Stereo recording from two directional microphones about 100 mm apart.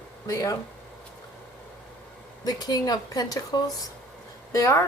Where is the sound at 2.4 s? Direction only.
40° left (ahead or behind).